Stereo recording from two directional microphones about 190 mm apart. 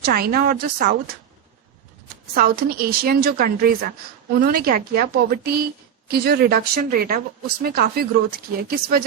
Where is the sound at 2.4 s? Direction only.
50° right (ahead or behind).